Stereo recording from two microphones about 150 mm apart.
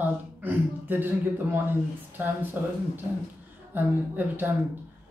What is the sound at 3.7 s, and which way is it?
Speech, 10° right (ahead or behind).